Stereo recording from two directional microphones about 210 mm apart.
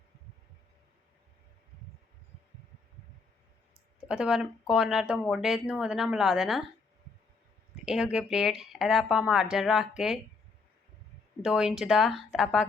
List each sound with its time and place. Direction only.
4.1 s speech: 5° right (ahead or behind)
7.9 s speech: 5° right (ahead or behind)
11.4 s speech: 5° right (ahead or behind)